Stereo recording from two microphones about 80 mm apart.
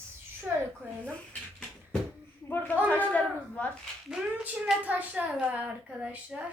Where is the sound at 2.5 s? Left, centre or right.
Left.